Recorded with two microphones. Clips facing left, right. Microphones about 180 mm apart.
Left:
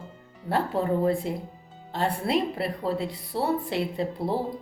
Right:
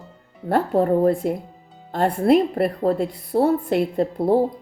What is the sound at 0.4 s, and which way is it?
Speech, 50° right (ahead or behind).